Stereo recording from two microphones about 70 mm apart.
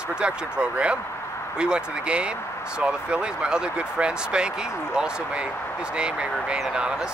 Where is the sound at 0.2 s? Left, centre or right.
Centre.